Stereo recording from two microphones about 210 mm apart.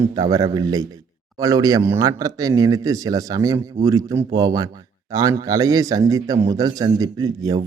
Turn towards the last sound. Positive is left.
turn(degrees=-15)  # may be behind; listen again after turning